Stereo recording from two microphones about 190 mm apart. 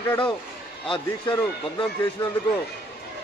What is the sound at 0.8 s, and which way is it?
A man's voice, 25° left (ahead or behind).